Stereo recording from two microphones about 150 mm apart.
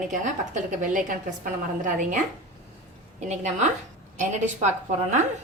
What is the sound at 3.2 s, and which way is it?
Speech, 50° right (ahead or behind).